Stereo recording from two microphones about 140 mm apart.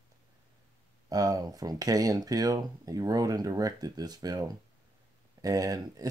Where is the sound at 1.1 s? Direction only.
25° right (ahead or behind).